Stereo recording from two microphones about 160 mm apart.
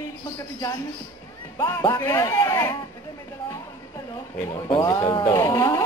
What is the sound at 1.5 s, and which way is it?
Speech, 15° left (ahead or behind).